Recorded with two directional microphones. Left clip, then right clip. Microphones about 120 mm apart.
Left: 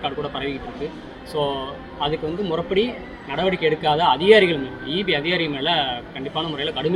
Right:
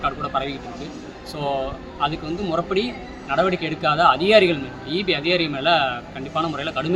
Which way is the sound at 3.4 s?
25° right (ahead or behind).